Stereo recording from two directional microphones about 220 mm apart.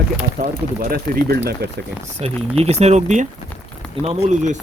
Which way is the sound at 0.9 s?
45° right (ahead or behind).